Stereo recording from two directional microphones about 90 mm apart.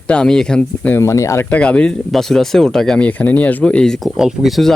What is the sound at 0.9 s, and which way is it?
Speech, 30° left (ahead or behind).